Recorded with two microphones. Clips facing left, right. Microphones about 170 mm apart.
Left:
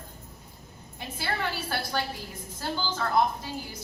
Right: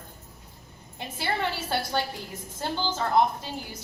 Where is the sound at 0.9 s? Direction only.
25° right (ahead or behind).